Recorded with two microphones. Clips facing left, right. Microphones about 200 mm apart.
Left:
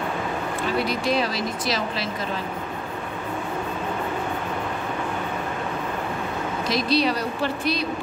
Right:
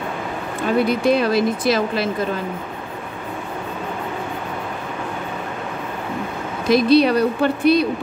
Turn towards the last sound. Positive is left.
turn(degrees=-55)  # may be behind; listen again after turning